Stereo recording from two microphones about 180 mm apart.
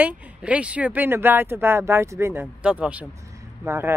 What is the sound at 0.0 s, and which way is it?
Speech, 5° right (ahead or behind).